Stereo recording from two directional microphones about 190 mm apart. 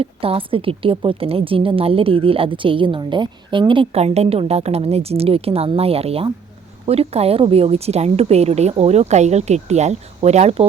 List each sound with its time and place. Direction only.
0.0 s a woman's voice: 30° right (ahead or behind)